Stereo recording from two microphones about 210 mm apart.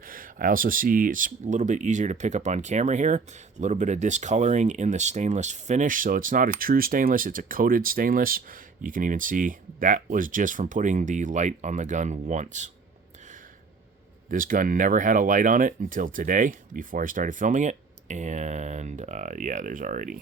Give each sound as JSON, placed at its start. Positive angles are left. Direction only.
{"t": 0.0, "sound": "speech", "side_deg": -40}
{"t": 14.3, "sound": "speech", "side_deg": -40}